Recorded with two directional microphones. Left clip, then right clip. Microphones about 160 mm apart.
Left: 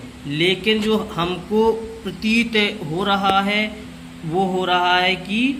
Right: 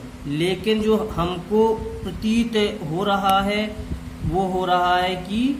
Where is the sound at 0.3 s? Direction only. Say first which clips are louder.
Left 3 dB; 15° left (ahead or behind).